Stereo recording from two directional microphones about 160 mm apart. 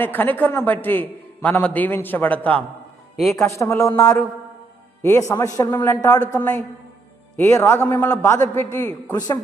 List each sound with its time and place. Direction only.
0.0 s a man's voice: 10° left (ahead or behind)
7.3 s a man's voice: 15° left (ahead or behind)